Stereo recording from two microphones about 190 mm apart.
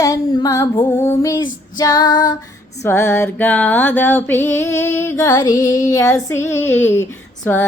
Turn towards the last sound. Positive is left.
turn(degrees=10)  # may be behind; listen again after turning